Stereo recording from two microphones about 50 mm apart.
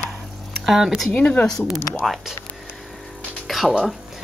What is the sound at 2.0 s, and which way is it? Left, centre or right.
Speech, centre.